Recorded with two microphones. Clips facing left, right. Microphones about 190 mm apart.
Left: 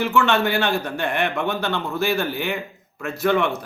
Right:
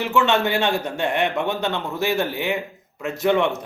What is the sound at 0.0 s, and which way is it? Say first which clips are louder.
A man's voice: even; 20° right (ahead or behind).